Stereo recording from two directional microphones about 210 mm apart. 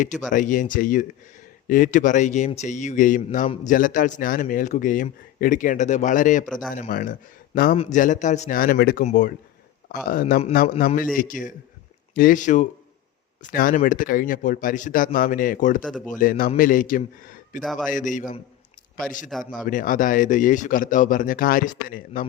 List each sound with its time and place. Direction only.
0.3 s speech: 40° left (ahead or behind)
6.4 s a man's voice: centre (ahead or behind)
6.7 s speech: 40° left (ahead or behind)
15.8 s a man's voice: 5° left (ahead or behind)
16.0 s a man's voice: 40° left (ahead or behind)
17.6 s a man's voice: centre (ahead or behind)
17.9 s speech: 40° left (ahead or behind)
19.3 s a man's voice: centre (ahead or behind)
19.6 s speech: 40° left (ahead or behind)